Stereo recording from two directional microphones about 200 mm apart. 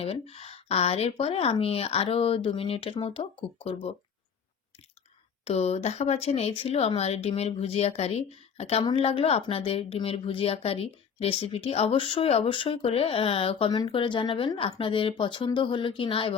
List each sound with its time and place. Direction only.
0.0 s speech: 30° left (ahead or behind)
5.5 s speech: 30° left (ahead or behind)